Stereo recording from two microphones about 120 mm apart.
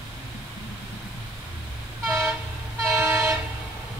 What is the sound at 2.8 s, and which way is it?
Train, 25° right (ahead or behind).